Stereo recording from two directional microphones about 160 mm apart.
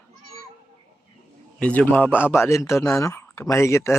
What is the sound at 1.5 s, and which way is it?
Speech, 10° left (ahead or behind).